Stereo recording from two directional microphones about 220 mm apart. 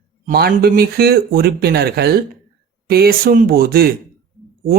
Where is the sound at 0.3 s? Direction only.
45° right (ahead or behind).